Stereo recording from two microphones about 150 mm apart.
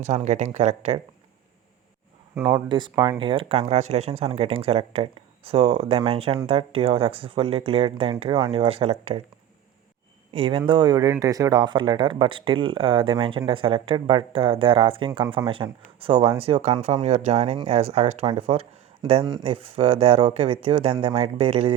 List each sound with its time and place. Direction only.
0.0 s speech: 55° right (ahead or behind)
2.5 s speech: 30° right (ahead or behind)
3.2 s speech: 35° right (ahead or behind)
10.3 s speech: 35° right (ahead or behind)
19.2 s speech: 25° right (ahead or behind)
19.5 s speech: 40° right (ahead or behind)